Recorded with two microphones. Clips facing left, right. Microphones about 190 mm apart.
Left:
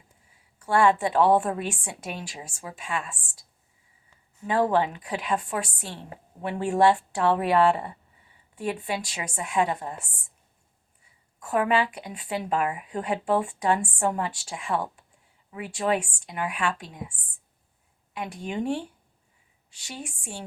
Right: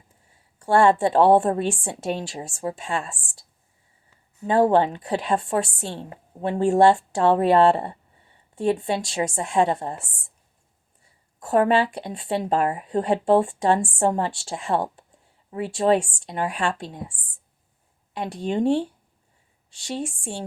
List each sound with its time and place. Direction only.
0.6 s speech: 30° right (ahead or behind)
4.4 s a woman's voice: 30° right (ahead or behind)
11.0 s speech: 35° right (ahead or behind)